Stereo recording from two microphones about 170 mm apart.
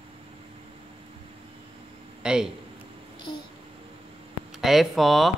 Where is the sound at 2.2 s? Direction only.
5° right (ahead or behind).